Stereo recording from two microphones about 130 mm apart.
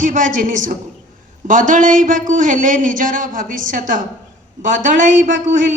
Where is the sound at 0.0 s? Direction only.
85° right.